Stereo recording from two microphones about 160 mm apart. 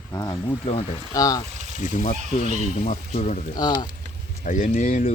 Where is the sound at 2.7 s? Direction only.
50° left (ahead or behind).